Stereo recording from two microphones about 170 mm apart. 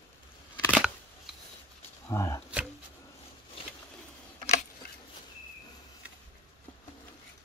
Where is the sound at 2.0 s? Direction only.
20° left (ahead or behind).